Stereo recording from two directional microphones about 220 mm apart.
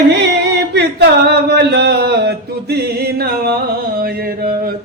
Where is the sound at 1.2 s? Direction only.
50° right (ahead or behind).